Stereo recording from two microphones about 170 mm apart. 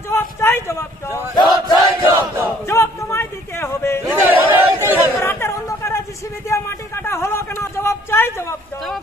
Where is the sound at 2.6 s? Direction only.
15° left (ahead or behind).